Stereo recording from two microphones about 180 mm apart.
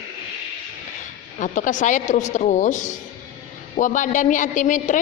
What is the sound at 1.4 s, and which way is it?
A woman's voice, 45° left (ahead or behind).